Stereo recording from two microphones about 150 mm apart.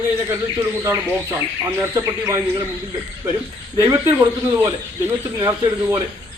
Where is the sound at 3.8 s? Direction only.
20° right (ahead or behind).